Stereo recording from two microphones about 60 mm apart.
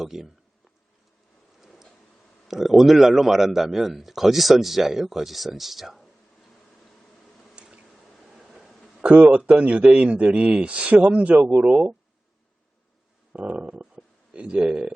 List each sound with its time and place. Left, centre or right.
0.0 s speech: centre
1.6 s a sound: centre
2.5 s a man's voice: centre
7.5 s squish: centre
8.2 s a sound: centre
9.0 s a man's voice: right
13.3 s speech: centre